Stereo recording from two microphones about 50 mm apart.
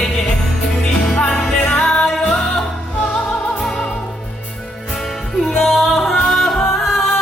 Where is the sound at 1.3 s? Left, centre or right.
Centre.